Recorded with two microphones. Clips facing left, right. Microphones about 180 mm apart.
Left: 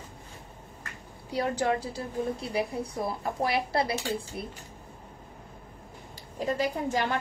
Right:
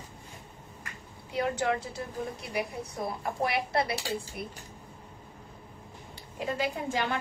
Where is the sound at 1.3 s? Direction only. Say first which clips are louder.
Left 1 dB; 30° left (ahead or behind).